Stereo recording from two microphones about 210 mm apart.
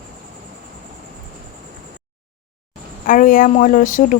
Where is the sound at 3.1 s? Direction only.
40° left (ahead or behind).